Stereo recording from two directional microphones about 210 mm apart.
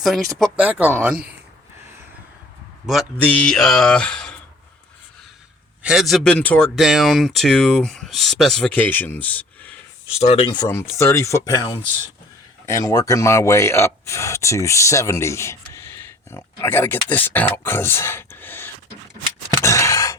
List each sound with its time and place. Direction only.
0.0 s speech: centre (ahead or behind)
2.8 s speech: centre (ahead or behind)
5.8 s speech: centre (ahead or behind)
10.2 s speech: 30° left (ahead or behind); by 18.7 s 10° left (ahead or behind)
19.6 s a sound: 15° left (ahead or behind)